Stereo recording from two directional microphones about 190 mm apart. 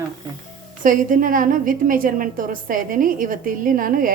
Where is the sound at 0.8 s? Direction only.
45° right (ahead or behind).